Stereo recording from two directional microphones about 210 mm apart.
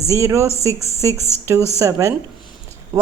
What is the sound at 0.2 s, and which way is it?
Speech, 15° right (ahead or behind).